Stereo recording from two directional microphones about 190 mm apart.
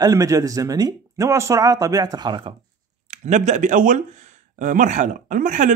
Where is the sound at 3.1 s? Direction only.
40° right (ahead or behind).